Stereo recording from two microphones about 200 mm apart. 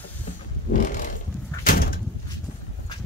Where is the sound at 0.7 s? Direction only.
40° left (ahead or behind).